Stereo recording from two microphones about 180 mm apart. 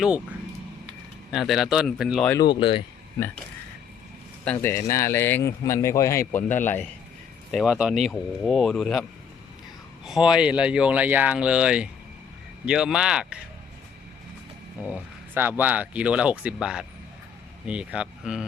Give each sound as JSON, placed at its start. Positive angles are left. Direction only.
{"t": 1.3, "sound": "speech", "side_deg": 0}
{"t": 2.3, "sound": "speech", "side_deg": 25}
{"t": 4.4, "sound": "speech", "side_deg": 15}
{"t": 7.5, "sound": "speech", "side_deg": -5}
{"t": 14.8, "sound": "speech", "side_deg": -10}